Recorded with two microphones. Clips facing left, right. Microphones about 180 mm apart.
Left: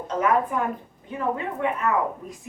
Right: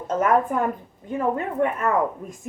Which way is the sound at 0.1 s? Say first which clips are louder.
Right 2 dB; 45° right (ahead or behind).